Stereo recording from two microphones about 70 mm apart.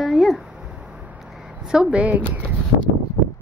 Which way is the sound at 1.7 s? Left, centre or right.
Centre.